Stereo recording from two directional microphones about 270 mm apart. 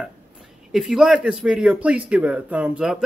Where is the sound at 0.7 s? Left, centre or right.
Centre.